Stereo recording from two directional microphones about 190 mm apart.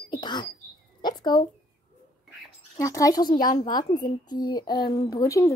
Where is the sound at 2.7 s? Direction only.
15° left (ahead or behind).